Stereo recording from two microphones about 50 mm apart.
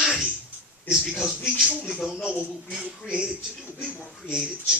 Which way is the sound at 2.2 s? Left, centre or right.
Right.